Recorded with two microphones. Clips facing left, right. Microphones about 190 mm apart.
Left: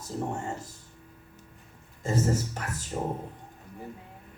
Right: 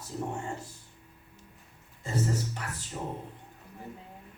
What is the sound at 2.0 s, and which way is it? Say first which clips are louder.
Speech: left 4 dB; 45° left (ahead or behind).